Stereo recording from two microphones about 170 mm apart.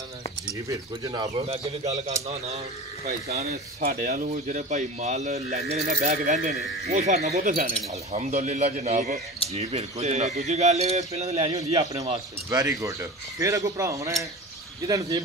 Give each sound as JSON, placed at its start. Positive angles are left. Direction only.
{"t": 0.7, "sound": "speech", "side_deg": -20}
{"t": 1.3, "sound": "a man's voice", "side_deg": -35}
{"t": 3.8, "sound": "a man's voice", "side_deg": -55}
{"t": 12.4, "sound": "speech", "side_deg": -20}